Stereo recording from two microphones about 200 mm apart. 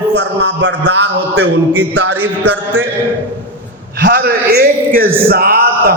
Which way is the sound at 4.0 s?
50° right (ahead or behind).